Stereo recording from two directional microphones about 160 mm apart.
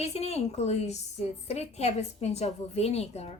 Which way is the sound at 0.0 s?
40° left (ahead or behind).